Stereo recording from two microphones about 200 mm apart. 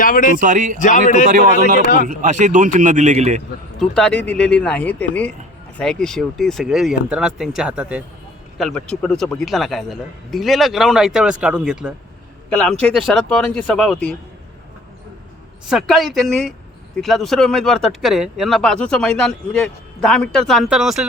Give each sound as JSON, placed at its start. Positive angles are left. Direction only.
{"t": 0.0, "sound": "speech", "side_deg": 40}
{"t": 0.3, "sound": "a man's voice", "side_deg": -40}
{"t": 0.8, "sound": "speech", "side_deg": 40}
{"t": 2.0, "sound": "a man's voice", "side_deg": -40}
{"t": 3.8, "sound": "a man's voice", "side_deg": 5}
{"t": 15.7, "sound": "speech", "side_deg": 0}